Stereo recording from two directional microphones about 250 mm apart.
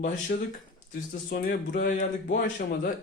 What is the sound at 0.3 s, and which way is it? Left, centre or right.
Speech, left.